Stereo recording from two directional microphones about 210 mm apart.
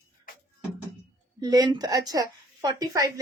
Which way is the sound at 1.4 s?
15° right (ahead or behind).